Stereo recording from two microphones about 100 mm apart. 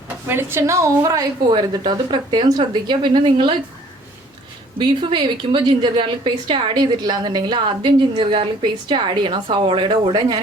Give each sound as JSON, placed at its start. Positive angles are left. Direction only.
{"t": 0.3, "sound": "a woman's voice", "side_deg": -25}
{"t": 1.5, "sound": "a woman's voice", "side_deg": -50}
{"t": 3.1, "sound": "a woman's voice", "side_deg": -60}
{"t": 4.8, "sound": "a woman's voice", "side_deg": -55}
{"t": 6.7, "sound": "a woman's voice", "side_deg": -45}